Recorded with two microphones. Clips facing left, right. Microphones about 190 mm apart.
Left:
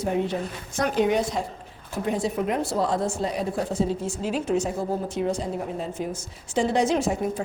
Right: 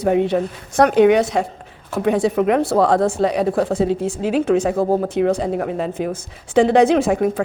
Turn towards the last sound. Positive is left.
turn(degrees=-90)